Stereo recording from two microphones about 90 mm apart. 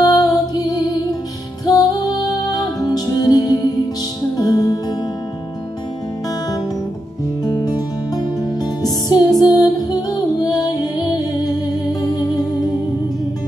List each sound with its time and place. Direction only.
0.0 s music: 45° left (ahead or behind)
7.4 s music: 45° left (ahead or behind)